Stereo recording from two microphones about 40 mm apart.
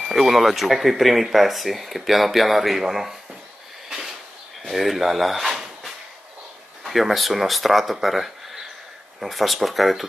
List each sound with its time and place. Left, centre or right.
0.1 s speech: centre
4.6 s speech: centre
6.8 s speech: centre